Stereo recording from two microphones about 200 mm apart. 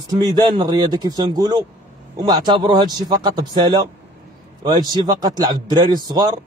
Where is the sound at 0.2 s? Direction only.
20° right (ahead or behind).